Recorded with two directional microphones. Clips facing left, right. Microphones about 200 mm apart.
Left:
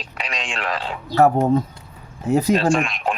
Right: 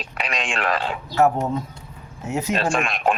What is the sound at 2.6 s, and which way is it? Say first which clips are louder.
Speech: left 4 dB; 55° right (ahead or behind).